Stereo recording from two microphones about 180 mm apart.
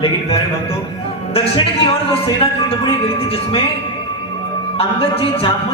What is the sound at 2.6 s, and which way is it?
Speech, 30° left (ahead or behind).